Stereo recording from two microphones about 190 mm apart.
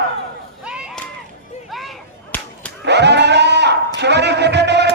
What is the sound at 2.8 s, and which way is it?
Sheep, 65° right (ahead or behind).